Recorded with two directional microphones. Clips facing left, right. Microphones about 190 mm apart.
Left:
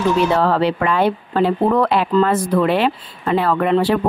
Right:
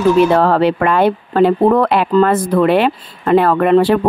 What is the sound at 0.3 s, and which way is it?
A woman's voice, 55° right (ahead or behind).